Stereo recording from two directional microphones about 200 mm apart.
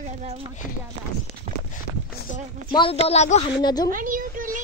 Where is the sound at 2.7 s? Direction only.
25° left (ahead or behind).